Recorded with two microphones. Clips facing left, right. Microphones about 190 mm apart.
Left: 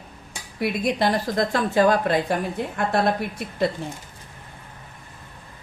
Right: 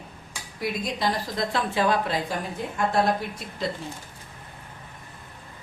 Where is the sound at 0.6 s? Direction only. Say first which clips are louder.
Left 5 dB; 60° left (ahead or behind).